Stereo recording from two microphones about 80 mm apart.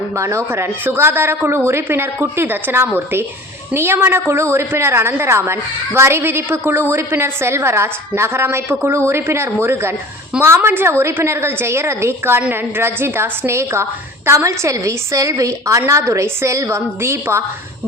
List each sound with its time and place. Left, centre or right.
0.2 s a woman's voice: right